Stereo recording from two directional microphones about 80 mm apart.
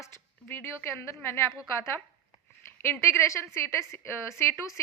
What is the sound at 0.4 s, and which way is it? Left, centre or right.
Speech, left.